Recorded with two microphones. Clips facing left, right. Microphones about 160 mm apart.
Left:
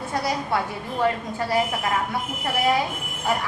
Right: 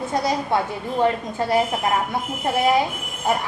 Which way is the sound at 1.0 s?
25° right (ahead or behind).